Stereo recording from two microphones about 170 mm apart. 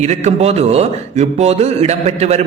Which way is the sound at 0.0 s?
40° right (ahead or behind).